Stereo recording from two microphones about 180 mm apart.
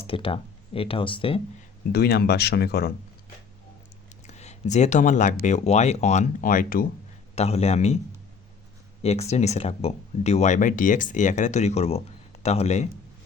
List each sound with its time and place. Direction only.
0.0 s speech: 30° left (ahead or behind)
1.9 s speech: 60° left (ahead or behind)
4.3 s speech: 40° left (ahead or behind)
7.3 s speech: 35° left (ahead or behind)
9.0 s speech: 35° left (ahead or behind)